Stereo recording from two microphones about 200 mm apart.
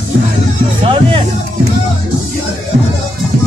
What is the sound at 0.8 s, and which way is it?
Music, 25° right (ahead or behind).